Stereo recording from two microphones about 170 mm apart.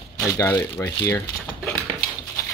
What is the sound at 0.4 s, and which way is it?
Speech, 20° left (ahead or behind).